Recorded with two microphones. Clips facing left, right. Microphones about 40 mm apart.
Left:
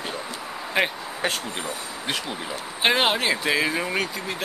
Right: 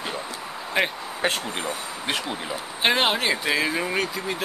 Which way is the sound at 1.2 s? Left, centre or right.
Right.